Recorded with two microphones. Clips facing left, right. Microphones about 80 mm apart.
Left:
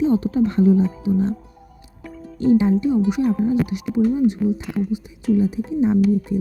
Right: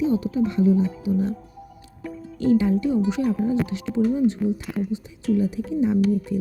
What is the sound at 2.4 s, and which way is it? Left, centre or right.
Speech, left.